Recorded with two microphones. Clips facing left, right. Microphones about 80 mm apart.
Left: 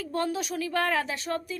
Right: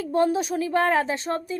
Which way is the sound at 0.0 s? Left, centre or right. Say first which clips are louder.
Right 7 dB; right.